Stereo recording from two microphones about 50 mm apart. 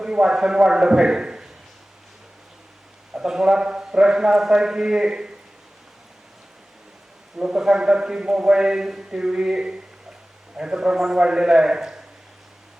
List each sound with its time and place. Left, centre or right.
0.0 s a man's voice: centre
3.2 s a man's voice: centre
7.3 s a man's voice: centre